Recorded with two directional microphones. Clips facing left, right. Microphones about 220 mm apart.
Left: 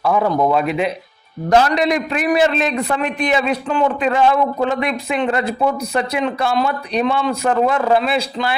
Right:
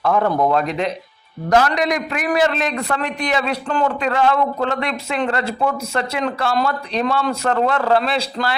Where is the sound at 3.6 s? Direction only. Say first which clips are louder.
Left 2 dB; 10° left (ahead or behind).